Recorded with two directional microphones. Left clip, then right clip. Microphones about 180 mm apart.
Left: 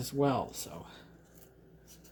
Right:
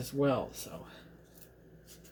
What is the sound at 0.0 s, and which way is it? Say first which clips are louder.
Speech: even; 35° left (ahead or behind).